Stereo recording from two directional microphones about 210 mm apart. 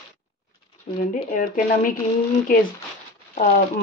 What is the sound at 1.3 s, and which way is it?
Speech, 40° left (ahead or behind).